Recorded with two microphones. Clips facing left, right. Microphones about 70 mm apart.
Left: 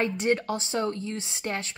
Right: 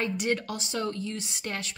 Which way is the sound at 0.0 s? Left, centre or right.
Left.